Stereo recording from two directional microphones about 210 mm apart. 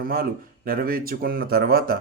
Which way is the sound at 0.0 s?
45° right (ahead or behind).